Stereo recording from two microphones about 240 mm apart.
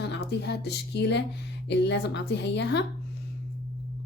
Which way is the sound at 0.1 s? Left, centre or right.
Left.